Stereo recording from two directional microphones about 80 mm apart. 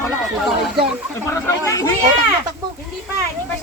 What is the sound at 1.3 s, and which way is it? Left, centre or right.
Speech, left.